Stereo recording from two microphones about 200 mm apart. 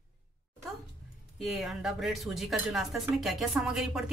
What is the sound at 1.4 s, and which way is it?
Speech, centre (ahead or behind).